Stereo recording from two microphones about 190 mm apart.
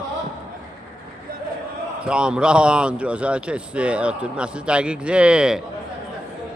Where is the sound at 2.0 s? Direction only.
5° right (ahead or behind).